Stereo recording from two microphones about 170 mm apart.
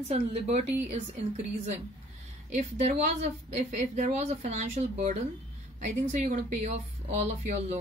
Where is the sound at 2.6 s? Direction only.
40° right (ahead or behind).